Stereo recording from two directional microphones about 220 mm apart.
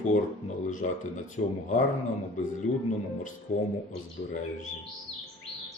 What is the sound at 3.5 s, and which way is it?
Speech, 30° left (ahead or behind).